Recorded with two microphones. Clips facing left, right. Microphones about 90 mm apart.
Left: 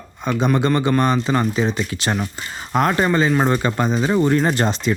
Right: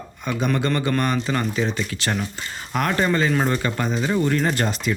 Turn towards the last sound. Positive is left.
turn(degrees=30)  # may be behind; listen again after turning